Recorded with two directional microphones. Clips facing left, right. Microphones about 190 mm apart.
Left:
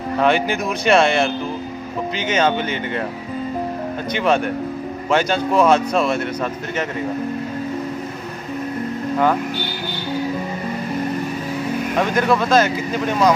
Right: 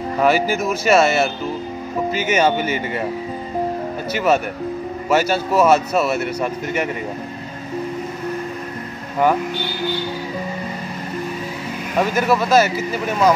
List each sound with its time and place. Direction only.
0.2 s speech: 5° right (ahead or behind)
4.1 s speech: 5° right (ahead or behind)
12.0 s speech: 5° right (ahead or behind)